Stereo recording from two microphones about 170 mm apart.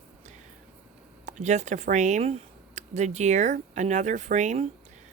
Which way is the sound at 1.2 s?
45° right (ahead or behind).